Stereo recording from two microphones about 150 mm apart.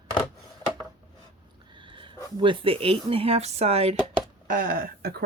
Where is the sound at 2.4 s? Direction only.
35° right (ahead or behind).